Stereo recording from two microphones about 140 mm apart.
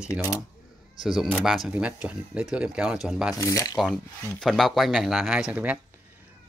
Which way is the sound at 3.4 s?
25° left (ahead or behind).